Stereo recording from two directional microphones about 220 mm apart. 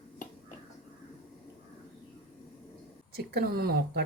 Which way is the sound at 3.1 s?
45° right (ahead or behind).